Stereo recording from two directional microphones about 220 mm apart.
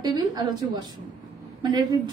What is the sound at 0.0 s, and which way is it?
A woman's voice, 20° right (ahead or behind).